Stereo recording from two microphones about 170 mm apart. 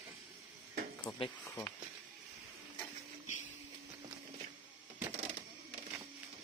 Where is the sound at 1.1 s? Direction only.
Centre (ahead or behind).